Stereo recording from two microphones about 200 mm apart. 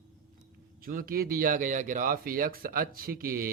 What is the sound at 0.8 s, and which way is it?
Speech, 45° right (ahead or behind).